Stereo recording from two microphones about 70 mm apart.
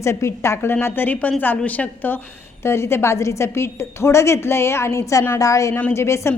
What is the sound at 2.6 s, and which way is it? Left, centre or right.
A woman's voice, left.